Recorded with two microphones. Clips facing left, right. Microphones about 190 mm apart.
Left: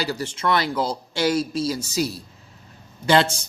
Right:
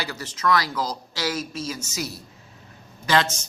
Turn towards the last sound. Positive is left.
turn(degrees=30)  # may be behind; listen again after turning